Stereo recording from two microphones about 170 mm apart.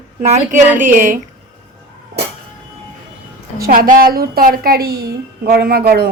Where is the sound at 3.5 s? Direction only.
60° right (ahead or behind).